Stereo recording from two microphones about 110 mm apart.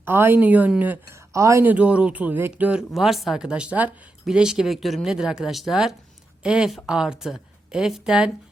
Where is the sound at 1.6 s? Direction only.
15° right (ahead or behind).